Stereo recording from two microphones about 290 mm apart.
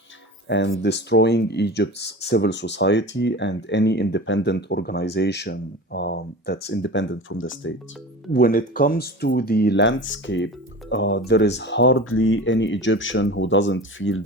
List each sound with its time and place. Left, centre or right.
0.4 s speech: left
8.3 s speech: left